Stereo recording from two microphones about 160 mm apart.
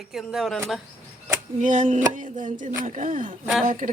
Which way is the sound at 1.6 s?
50° right (ahead or behind).